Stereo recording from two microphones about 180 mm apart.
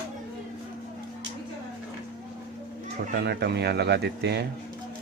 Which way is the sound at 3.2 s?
65° right (ahead or behind).